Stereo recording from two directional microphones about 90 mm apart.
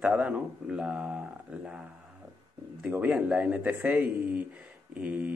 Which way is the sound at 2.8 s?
20° right (ahead or behind).